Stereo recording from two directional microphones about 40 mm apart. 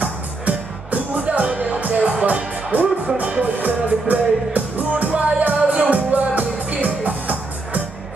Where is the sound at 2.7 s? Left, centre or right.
Right.